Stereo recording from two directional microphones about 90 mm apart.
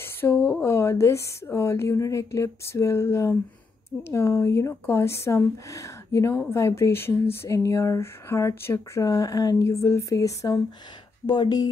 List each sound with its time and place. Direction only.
0.0 s a woman's voice: 25° left (ahead or behind)
11.2 s speech: 55° left (ahead or behind)